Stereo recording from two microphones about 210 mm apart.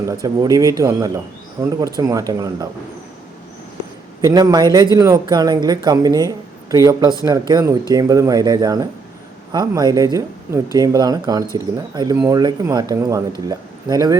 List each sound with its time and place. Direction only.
0.1 s speech: 15° right (ahead or behind)
4.2 s speech: 15° right (ahead or behind)